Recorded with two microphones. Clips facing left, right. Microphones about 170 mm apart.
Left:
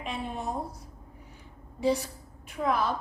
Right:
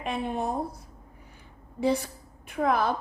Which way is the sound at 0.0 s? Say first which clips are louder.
Right 5 dB; 55° right (ahead or behind).